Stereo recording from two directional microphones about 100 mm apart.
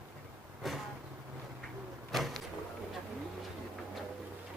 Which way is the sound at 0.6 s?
Centre (ahead or behind).